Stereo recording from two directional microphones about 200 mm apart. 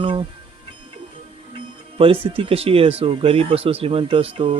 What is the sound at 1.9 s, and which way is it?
Speech, 25° right (ahead or behind).